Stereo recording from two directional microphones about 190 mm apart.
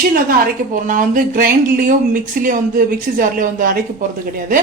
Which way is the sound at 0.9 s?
45° right (ahead or behind).